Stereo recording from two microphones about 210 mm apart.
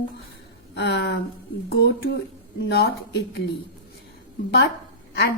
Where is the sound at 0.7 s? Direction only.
55° left (ahead or behind).